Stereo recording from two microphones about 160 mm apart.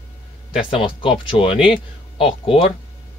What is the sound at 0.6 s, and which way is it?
Speech, 35° left (ahead or behind).